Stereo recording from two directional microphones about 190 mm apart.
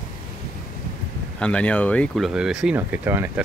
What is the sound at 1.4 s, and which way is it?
Speech, 5° left (ahead or behind).